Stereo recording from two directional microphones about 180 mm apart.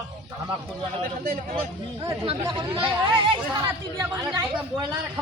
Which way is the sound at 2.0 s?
25° right (ahead or behind).